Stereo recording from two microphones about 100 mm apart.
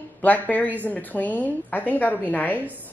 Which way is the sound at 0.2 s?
15° left (ahead or behind).